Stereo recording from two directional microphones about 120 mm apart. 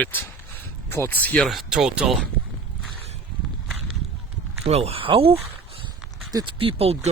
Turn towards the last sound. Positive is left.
turn(degrees=-55)  # may be behind; listen again after turning